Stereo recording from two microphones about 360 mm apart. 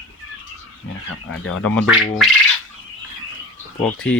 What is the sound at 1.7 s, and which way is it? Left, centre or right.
Speech, centre.